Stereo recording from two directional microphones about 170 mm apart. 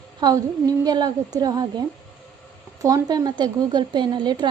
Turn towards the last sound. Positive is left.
turn(degrees=-25)  # may be behind; listen again after turning